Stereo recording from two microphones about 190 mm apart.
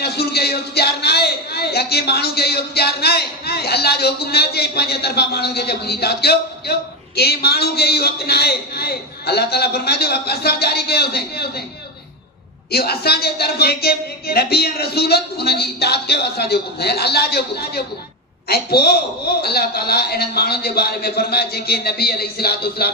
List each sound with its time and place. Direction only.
0.0 s a man's voice: 55° left (ahead or behind)
12.7 s a man's voice: 55° left (ahead or behind)